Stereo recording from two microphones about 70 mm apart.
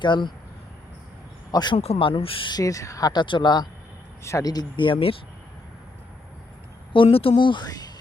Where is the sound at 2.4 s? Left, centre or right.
Left.